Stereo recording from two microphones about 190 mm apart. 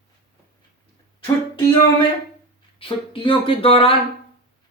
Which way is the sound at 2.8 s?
30° left (ahead or behind).